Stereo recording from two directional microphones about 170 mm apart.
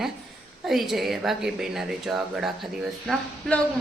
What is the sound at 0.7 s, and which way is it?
Speech, centre (ahead or behind).